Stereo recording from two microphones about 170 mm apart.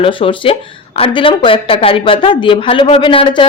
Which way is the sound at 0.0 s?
30° left (ahead or behind).